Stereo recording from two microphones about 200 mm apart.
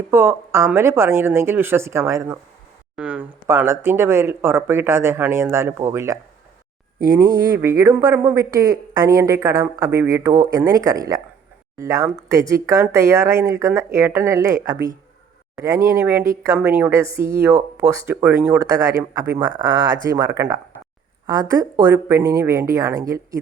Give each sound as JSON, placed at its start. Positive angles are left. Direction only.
{"t": 0.1, "sound": "speech", "side_deg": -10}